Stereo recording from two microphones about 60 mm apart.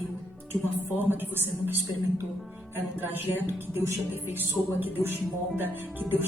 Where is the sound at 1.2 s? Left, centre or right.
Right.